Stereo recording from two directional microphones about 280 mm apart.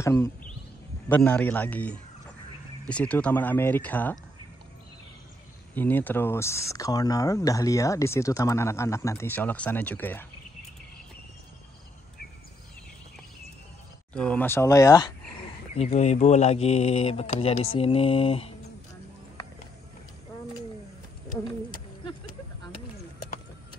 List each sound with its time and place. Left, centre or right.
0.0 s speech: centre
5.8 s speech: centre
14.1 s speech: centre
15.7 s speech: left